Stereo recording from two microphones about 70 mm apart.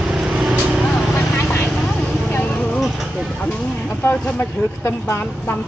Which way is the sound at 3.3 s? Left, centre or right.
Centre.